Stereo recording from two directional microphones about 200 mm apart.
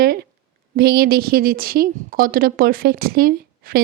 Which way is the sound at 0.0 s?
50° right (ahead or behind).